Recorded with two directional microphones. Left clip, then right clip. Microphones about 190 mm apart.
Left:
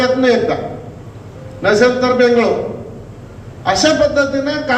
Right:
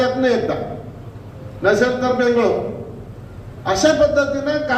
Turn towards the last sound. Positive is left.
turn(degrees=30)  # may be behind; listen again after turning